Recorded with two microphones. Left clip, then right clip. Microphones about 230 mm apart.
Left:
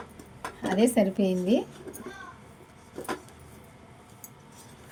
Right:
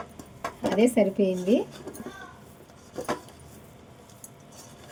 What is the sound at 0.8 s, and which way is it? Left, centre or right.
Speech, left.